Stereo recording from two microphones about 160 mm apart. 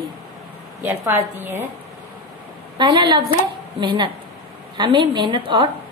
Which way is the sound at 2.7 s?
30° right (ahead or behind).